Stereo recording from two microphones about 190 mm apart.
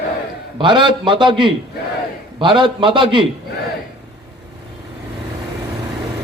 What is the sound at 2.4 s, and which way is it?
Speech, 25° right (ahead or behind).